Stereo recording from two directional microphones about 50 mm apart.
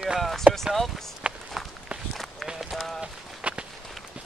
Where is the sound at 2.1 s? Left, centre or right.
Centre.